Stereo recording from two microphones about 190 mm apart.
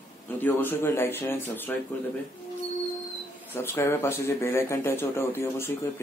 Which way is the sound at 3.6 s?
15° left (ahead or behind).